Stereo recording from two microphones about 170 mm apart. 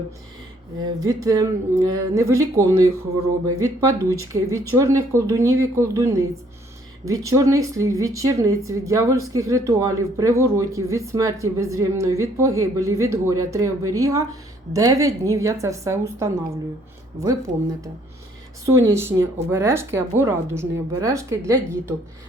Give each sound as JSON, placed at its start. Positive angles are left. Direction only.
{"t": 0.9, "sound": "a woman's voice", "side_deg": -20}
{"t": 18.6, "sound": "speech", "side_deg": -20}